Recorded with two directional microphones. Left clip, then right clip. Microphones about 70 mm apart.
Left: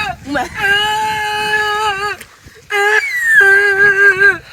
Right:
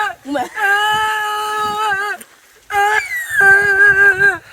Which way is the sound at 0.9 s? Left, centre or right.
Right.